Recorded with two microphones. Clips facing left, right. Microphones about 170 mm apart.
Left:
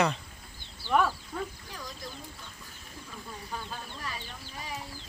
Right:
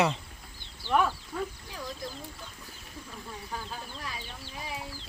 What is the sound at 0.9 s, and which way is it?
Speech, centre (ahead or behind).